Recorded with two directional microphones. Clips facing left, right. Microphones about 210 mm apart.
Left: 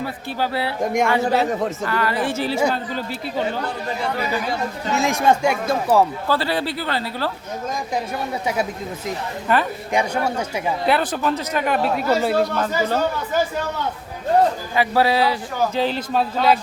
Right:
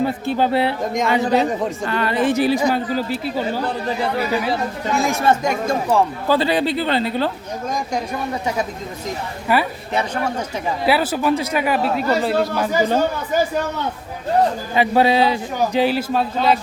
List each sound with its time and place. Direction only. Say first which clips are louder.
0.0 s a man's voice: right 6 dB; 20° right (ahead or behind); by 3.6 s 5° right (ahead or behind)
5.0 s speech: left 2 dB; 15° left (ahead or behind)
6.2 s a man's voice: right 4 dB; 15° right (ahead or behind)
8.3 s speech: even; 10° left (ahead or behind)
9.5 s a man's voice: right 1 dB; 10° right (ahead or behind)
9.9 s speech: left 1 dB; 10° left (ahead or behind)
10.8 s a man's voice: right 4 dB; 5° right (ahead or behind)
12.6 s a man's voice: right 3 dB; 15° right (ahead or behind)
14.8 s a man's voice: right 3 dB; 20° right (ahead or behind); by 16.6 s centre (ahead or behind)